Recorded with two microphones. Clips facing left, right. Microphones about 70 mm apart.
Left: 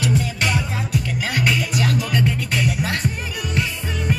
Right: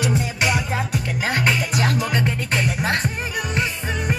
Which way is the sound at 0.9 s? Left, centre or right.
Right.